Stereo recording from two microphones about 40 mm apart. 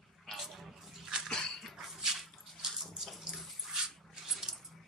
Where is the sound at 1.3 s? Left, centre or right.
Centre.